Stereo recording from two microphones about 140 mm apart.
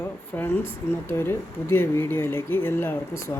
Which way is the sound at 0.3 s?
15° left (ahead or behind).